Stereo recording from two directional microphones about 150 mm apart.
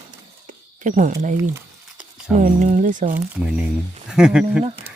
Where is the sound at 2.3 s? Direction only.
55° right (ahead or behind).